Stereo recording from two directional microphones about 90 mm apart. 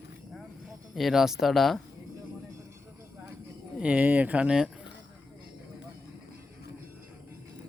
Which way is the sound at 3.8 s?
15° right (ahead or behind).